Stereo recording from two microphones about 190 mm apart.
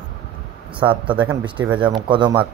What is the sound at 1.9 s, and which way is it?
Speech, 25° right (ahead or behind).